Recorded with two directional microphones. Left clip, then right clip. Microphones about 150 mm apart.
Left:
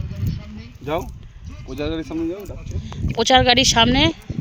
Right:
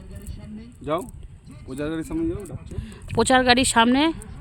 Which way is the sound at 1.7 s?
20° right (ahead or behind).